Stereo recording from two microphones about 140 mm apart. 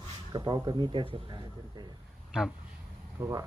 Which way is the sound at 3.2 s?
20° right (ahead or behind).